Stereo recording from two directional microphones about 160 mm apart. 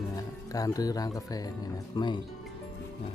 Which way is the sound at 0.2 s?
20° left (ahead or behind).